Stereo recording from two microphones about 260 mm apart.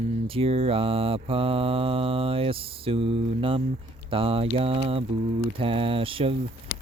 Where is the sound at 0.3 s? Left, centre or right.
Right.